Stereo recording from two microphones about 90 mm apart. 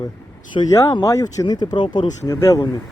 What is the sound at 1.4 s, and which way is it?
Speech, 50° left (ahead or behind).